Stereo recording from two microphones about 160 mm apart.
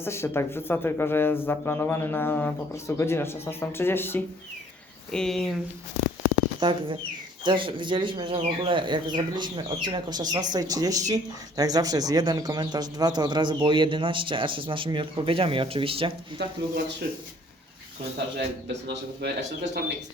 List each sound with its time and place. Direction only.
0.0 s speech: 15° left (ahead or behind)
5.1 s speech: 5° left (ahead or behind)
6.6 s speech: 30° right (ahead or behind)
16.4 s a man's voice: 90° right
18.3 s a man's voice: 90° right